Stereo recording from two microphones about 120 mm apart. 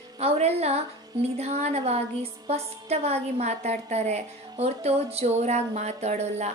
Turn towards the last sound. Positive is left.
turn(degrees=-70)  # may be behind; listen again after turning